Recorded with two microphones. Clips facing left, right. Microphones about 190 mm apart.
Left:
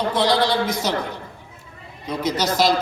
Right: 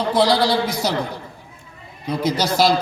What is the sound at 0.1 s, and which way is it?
A man's voice, 35° right (ahead or behind).